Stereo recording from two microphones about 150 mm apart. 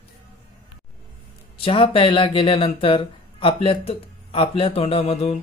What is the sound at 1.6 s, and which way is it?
Speech, 35° left (ahead or behind).